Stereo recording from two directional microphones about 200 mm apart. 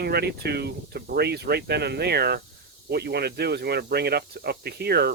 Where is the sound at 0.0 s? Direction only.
55° right (ahead or behind).